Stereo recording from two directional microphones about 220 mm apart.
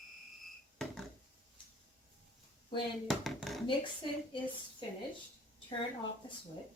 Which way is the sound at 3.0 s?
Centre (ahead or behind).